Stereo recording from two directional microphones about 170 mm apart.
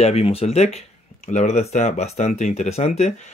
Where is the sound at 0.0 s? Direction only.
35° left (ahead or behind).